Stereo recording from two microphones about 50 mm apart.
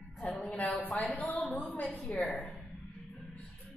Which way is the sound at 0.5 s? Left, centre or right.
Left.